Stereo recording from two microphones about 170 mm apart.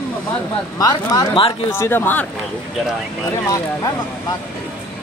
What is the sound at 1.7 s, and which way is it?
Speech, 15° left (ahead or behind).